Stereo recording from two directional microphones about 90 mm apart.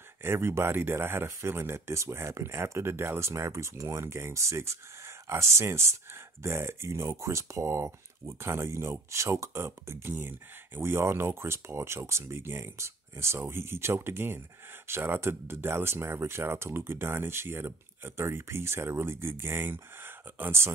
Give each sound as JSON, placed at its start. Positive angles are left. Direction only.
{"t": 0.2, "sound": "speech", "side_deg": -25}